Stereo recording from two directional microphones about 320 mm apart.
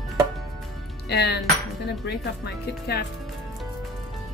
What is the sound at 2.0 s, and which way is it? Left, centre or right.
Speech, left.